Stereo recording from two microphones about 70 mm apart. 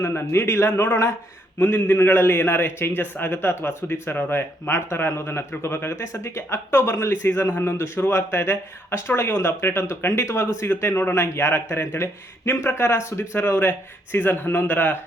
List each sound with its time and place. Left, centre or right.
0.0 s a man's voice: left